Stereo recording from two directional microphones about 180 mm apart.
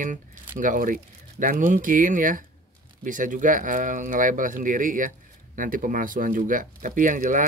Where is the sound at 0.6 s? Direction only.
50° right (ahead or behind).